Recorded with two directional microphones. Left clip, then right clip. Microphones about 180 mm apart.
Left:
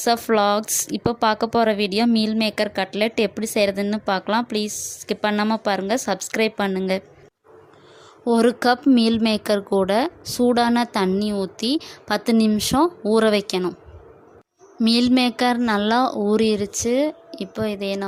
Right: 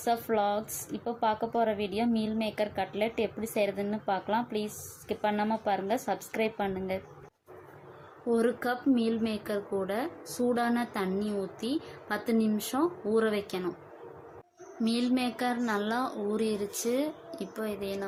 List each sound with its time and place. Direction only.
0.0 s speech: 55° left (ahead or behind)
8.3 s speech: 50° left (ahead or behind)
14.8 s a woman's voice: 55° left (ahead or behind)